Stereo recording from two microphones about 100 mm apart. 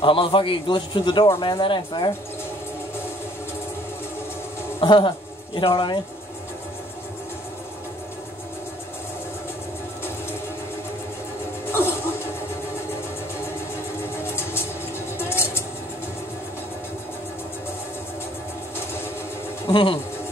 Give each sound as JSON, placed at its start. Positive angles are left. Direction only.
{"t": 0.0, "sound": "a man's voice", "side_deg": 55}
{"t": 4.7, "sound": "a man's voice", "side_deg": 55}
{"t": 14.1, "sound": "a sound", "side_deg": 25}
{"t": 15.1, "sound": "vehicle", "side_deg": 25}
{"t": 19.7, "sound": "speech", "side_deg": 55}